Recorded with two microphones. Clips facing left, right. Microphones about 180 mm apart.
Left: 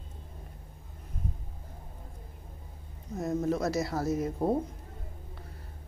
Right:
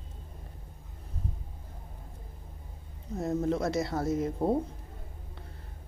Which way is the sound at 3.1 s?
30° right (ahead or behind).